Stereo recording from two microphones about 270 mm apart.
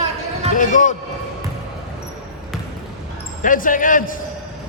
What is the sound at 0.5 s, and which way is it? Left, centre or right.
Speech, left.